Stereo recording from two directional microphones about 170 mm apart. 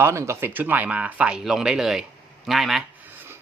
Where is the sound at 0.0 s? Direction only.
15° right (ahead or behind).